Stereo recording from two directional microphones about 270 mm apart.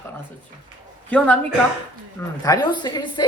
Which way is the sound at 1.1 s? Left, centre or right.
Centre.